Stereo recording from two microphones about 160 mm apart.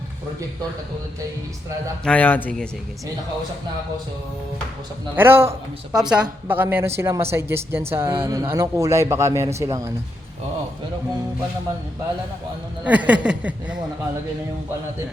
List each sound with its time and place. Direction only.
2.0 s a man's voice: 10° left (ahead or behind)
5.1 s speech: 15° right (ahead or behind)
5.9 s a woman's voice: 5° right (ahead or behind)
12.8 s speech: 10° right (ahead or behind)